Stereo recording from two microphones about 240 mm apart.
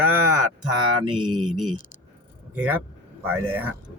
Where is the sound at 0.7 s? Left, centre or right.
Centre.